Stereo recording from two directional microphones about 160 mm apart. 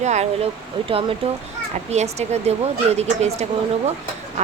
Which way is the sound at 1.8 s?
45° right (ahead or behind).